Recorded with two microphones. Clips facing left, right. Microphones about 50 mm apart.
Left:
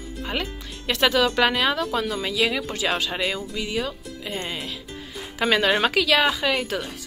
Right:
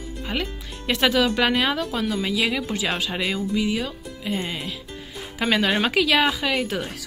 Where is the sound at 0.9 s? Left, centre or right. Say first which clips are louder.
Even; centre.